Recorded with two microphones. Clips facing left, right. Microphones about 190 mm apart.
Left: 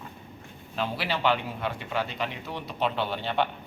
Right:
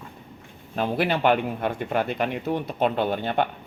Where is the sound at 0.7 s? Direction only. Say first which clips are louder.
Right 6 dB; 50° right (ahead or behind).